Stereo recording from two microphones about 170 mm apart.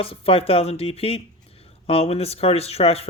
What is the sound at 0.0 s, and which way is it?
Speech, 35° left (ahead or behind).